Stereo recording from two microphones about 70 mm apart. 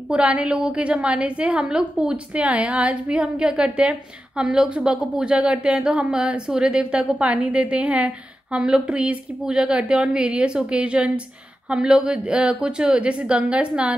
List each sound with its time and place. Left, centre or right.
0.1 s a woman's voice: centre